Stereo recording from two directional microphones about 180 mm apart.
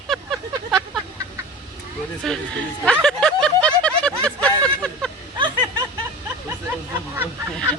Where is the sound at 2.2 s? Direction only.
Centre (ahead or behind).